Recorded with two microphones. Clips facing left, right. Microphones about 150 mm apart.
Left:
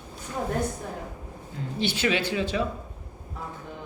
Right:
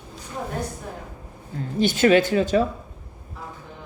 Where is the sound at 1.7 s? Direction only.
45° right (ahead or behind).